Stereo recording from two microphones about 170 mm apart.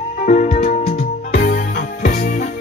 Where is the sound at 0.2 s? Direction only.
45° left (ahead or behind).